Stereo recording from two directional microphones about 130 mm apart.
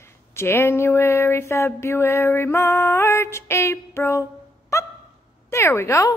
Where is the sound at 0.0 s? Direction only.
20° left (ahead or behind).